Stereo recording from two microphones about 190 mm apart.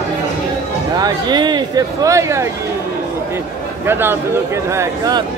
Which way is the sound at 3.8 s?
10° right (ahead or behind).